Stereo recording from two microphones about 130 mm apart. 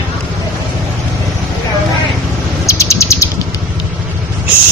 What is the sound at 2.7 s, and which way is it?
Bird, 20° left (ahead or behind).